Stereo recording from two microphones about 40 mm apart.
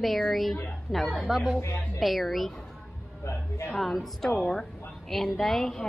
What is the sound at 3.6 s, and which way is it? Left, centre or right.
Speech, centre.